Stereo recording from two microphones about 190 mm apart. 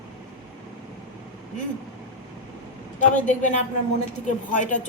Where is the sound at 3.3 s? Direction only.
40° left (ahead or behind).